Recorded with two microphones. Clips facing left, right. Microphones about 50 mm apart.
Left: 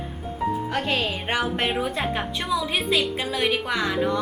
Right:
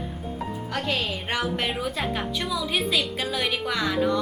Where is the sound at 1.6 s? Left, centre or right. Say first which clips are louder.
Left 3 dB; centre.